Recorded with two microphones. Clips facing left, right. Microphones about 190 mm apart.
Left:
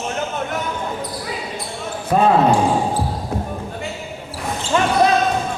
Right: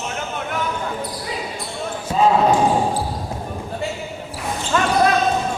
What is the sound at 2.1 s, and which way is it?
Speech, 55° left (ahead or behind).